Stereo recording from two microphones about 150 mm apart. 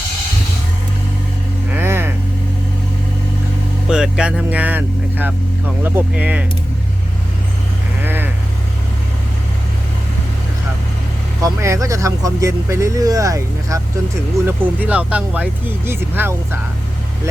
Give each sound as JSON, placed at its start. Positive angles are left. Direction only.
{"t": 1.7, "sound": "a sound", "side_deg": -15}
{"t": 3.8, "sound": "speech", "side_deg": -5}
{"t": 8.0, "sound": "vehicle", "side_deg": -15}
{"t": 11.4, "sound": "speech", "side_deg": -20}
{"t": 14.4, "sound": "speech", "side_deg": -10}